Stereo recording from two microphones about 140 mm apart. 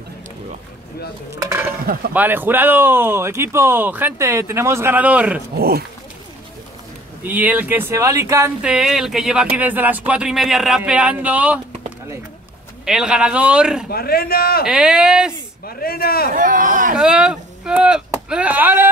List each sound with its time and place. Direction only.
2.1 s speech: 15° right (ahead or behind)
7.2 s speech: 10° right (ahead or behind)
8.6 s a man's voice: 5° right (ahead or behind)
12.8 s a man's voice: 5° right (ahead or behind)
13.8 s speech: 90° left
14.7 s a man's voice: 5° right (ahead or behind)
15.6 s speech: 90° left
16.3 s speech: 75° right (ahead or behind)
16.9 s speech: 5° right (ahead or behind)